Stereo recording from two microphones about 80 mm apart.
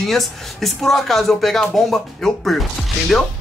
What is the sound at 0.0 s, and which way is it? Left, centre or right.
Speech, centre.